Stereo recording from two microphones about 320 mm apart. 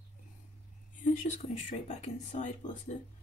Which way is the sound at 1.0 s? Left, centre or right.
Left.